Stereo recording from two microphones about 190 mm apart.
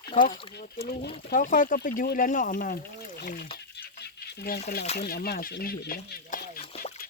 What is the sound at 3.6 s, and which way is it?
Stir, 60° left (ahead or behind).